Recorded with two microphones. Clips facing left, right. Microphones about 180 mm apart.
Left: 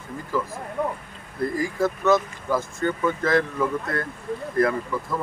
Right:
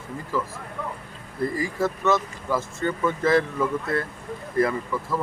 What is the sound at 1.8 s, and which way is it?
Speech, centre (ahead or behind).